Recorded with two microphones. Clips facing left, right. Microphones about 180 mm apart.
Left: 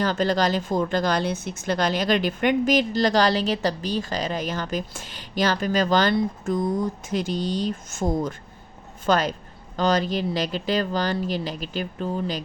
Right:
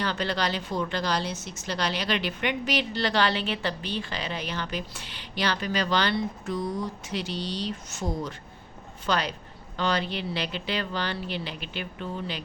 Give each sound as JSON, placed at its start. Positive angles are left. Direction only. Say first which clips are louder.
{"t": 0.0, "sound": "a woman's voice", "louder": "left 6 dB", "side_deg": 45}